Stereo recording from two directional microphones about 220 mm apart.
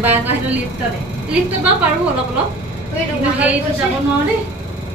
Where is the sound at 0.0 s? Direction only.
10° right (ahead or behind).